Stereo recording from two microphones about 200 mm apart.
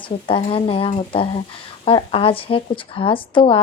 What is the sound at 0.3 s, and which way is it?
Speech, 25° left (ahead or behind).